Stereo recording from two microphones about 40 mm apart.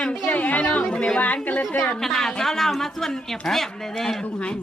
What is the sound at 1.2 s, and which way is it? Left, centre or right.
Speech, left.